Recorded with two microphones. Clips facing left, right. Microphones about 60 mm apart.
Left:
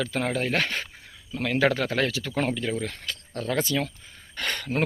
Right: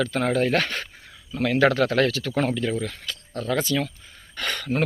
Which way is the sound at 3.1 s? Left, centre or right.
Left.